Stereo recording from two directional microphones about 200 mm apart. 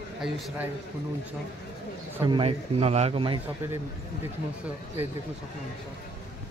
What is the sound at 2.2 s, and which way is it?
A man's voice, 25° right (ahead or behind).